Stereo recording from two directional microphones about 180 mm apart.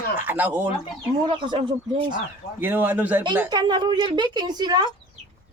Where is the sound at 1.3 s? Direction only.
30° right (ahead or behind).